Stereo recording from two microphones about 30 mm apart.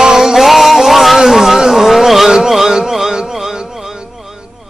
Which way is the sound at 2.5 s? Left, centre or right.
Centre.